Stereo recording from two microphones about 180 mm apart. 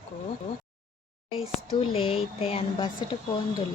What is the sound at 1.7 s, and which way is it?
A woman's voice, 30° left (ahead or behind).